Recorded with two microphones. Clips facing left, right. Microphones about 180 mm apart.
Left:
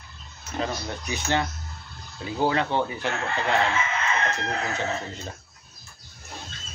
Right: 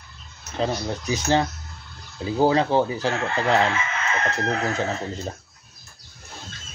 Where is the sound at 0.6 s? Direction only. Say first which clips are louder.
Right 4 dB; 35° right (ahead or behind).